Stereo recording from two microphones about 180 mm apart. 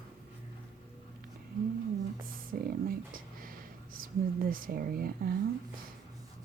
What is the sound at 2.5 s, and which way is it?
Speech, 55° right (ahead or behind).